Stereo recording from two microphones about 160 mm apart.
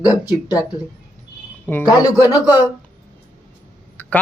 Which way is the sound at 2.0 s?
25° left (ahead or behind).